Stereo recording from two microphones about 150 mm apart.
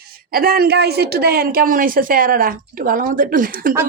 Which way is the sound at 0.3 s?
80° right.